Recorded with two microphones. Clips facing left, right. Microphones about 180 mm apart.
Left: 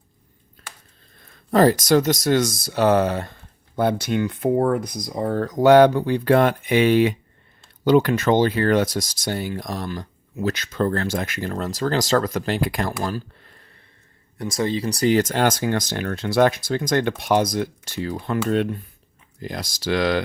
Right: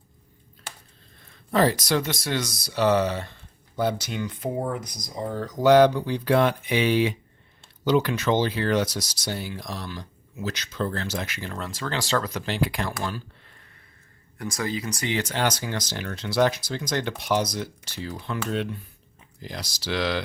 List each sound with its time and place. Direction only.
1.5 s speech: 45° left (ahead or behind)
14.3 s speech: 25° left (ahead or behind); by 20.2 s 50° left (ahead or behind)